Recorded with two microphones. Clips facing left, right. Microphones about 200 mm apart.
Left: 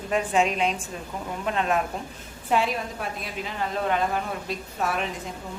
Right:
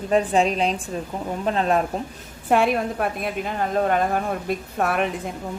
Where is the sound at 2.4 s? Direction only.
55° right (ahead or behind).